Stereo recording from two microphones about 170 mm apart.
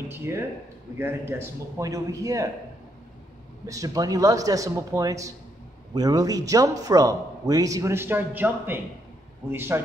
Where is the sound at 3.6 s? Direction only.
20° right (ahead or behind).